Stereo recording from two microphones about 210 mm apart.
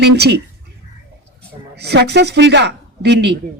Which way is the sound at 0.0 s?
55° right (ahead or behind).